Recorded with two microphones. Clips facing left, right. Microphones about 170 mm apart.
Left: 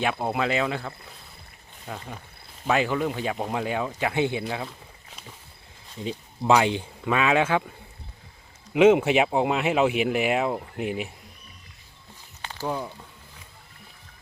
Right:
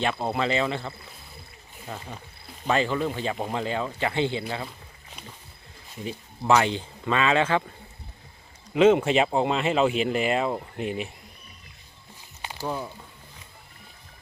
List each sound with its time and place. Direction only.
0.0 s speech: 15° left (ahead or behind)
6.5 s speech: 15° left (ahead or behind)
8.7 s speech: 10° left (ahead or behind)
12.4 s a sound: 10° right (ahead or behind)